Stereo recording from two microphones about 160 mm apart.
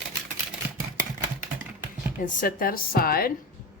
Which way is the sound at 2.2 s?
60° left (ahead or behind).